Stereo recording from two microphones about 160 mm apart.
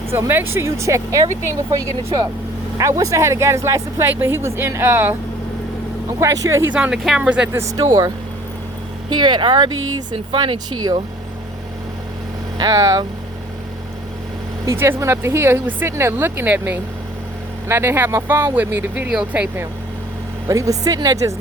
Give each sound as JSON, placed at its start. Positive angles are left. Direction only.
{"t": 0.1, "sound": "speech", "side_deg": -15}
{"t": 6.1, "sound": "speech", "side_deg": -20}
{"t": 6.7, "sound": "speech", "side_deg": -5}
{"t": 7.8, "sound": "speech", "side_deg": -20}
{"t": 12.5, "sound": "speech", "side_deg": -25}
{"t": 14.6, "sound": "speech", "side_deg": -15}
{"t": 20.5, "sound": "speech", "side_deg": -20}